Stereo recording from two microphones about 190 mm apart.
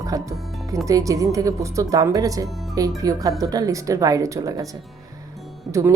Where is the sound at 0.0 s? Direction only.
15° right (ahead or behind).